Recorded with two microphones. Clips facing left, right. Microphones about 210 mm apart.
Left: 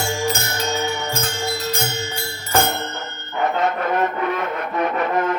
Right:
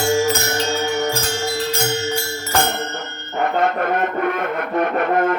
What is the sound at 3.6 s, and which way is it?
Music, 55° right (ahead or behind).